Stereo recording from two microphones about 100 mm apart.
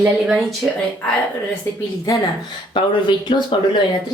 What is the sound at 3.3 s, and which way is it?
Speech, 55° left (ahead or behind).